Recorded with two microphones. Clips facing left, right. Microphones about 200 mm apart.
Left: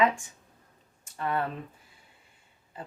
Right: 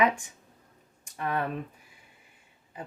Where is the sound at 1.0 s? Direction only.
15° right (ahead or behind).